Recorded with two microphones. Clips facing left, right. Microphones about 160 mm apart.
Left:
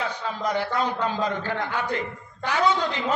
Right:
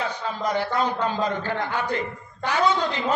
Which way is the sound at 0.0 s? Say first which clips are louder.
Right 1 dB; 35° right (ahead or behind).